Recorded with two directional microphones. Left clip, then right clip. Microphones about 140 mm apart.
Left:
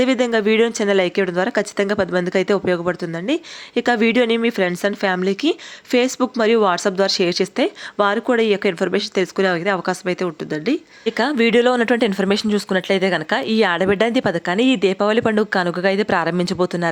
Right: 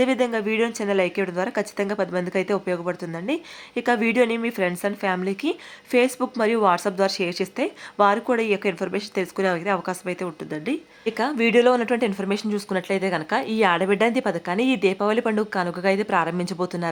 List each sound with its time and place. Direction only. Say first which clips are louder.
0.0 s a woman's voice: left 5 dB; 25° left (ahead or behind)